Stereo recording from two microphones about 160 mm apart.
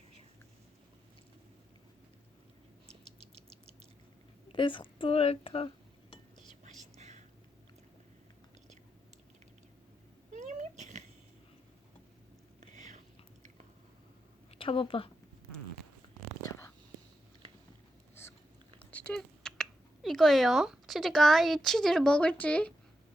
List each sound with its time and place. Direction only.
4.5 s speech: 30° left (ahead or behind)
10.3 s a sound: 50° right (ahead or behind)
12.5 s whispering: 50° right (ahead or behind)
14.6 s a woman's voice: 35° left (ahead or behind)
18.1 s a sound: 15° left (ahead or behind)
18.8 s speech: 10° left (ahead or behind)